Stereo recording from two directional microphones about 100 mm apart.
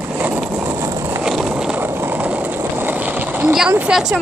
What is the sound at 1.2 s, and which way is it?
Vehicle, 5° right (ahead or behind).